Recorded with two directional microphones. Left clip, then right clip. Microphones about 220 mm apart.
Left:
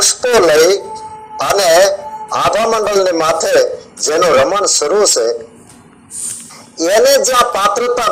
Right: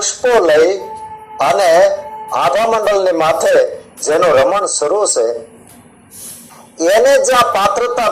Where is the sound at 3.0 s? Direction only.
45° left (ahead or behind).